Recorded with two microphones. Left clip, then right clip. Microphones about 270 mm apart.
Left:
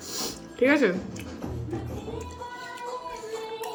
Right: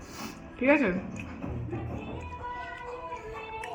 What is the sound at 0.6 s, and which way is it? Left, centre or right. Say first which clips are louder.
Speech: left 3 dB; centre.